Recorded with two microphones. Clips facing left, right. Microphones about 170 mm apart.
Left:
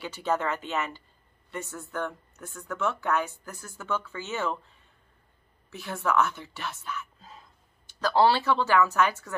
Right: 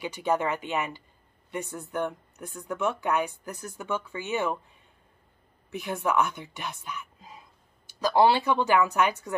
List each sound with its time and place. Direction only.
0.0 s speech: 15° right (ahead or behind)